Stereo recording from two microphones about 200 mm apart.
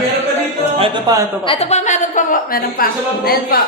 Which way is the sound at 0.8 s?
20° right (ahead or behind).